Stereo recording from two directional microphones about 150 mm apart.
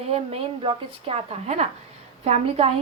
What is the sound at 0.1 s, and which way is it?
A woman's voice, 40° right (ahead or behind).